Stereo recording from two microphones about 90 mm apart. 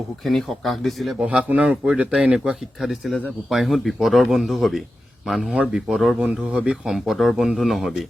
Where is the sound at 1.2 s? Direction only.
15° right (ahead or behind).